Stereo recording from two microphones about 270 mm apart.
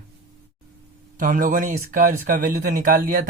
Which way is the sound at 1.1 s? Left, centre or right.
Right.